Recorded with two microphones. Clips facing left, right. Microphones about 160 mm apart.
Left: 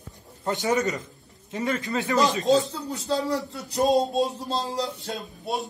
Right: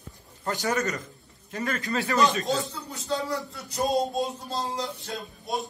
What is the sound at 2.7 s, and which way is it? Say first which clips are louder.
A man's voice: left 4 dB; 35° left (ahead or behind).